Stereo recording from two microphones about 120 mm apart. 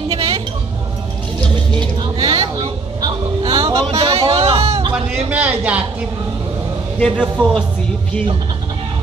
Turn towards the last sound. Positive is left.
turn(degrees=10)  # may be behind; listen again after turning